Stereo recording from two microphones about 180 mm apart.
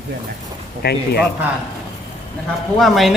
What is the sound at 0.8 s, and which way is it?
Speech, 60° left (ahead or behind).